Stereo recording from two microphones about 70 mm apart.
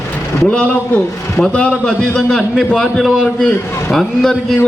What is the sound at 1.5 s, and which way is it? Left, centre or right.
A man's voice, centre.